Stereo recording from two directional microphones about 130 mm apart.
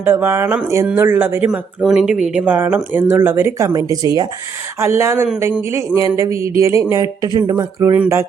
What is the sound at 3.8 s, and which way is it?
Speech, 30° right (ahead or behind).